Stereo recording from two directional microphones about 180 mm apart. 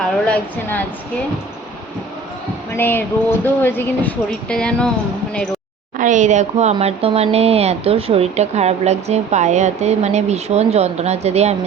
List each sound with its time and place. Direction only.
0.0 s a woman's voice: 10° left (ahead or behind)
2.7 s a woman's voice: 10° left (ahead or behind)
6.0 s speech: 45° right (ahead or behind)